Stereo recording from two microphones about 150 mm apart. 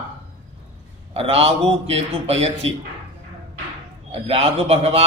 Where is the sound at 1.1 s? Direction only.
40° right (ahead or behind).